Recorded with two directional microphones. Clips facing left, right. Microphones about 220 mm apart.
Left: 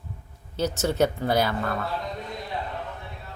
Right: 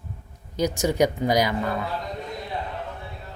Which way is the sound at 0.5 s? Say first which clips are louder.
Right 2 dB; 15° right (ahead or behind).